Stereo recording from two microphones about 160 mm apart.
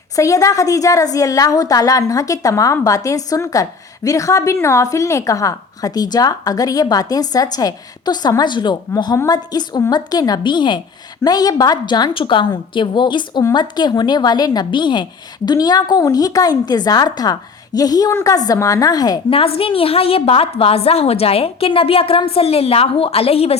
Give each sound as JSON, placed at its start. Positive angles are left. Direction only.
{"t": 0.2, "sound": "a woman's voice", "side_deg": 20}
{"t": 19.3, "sound": "a woman's voice", "side_deg": 35}